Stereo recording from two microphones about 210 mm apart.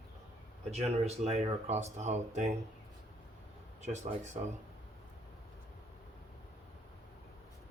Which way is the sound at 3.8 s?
35° right (ahead or behind).